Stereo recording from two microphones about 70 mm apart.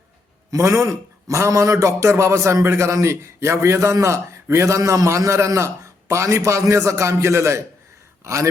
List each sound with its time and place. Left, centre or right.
0.5 s a man's voice: right